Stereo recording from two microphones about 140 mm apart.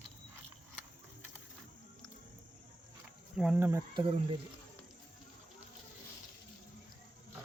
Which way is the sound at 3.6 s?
20° right (ahead or behind).